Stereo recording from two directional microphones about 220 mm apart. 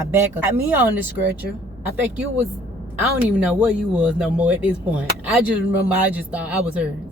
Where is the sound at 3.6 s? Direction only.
5° right (ahead or behind).